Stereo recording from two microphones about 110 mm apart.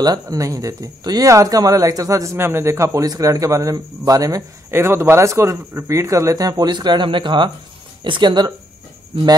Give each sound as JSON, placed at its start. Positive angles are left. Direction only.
{"t": 0.0, "sound": "speech", "side_deg": -35}